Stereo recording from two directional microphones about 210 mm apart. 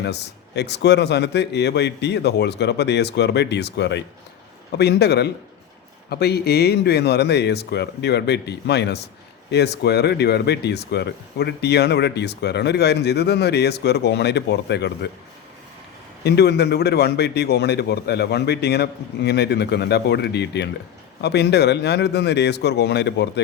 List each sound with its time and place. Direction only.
0.0 s speech: 55° left (ahead or behind)
16.2 s speech: 50° left (ahead or behind)